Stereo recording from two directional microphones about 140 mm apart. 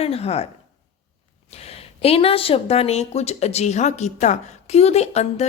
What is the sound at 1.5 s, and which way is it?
Speech, 45° left (ahead or behind).